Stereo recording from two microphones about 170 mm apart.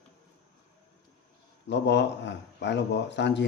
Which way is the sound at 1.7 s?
90° left.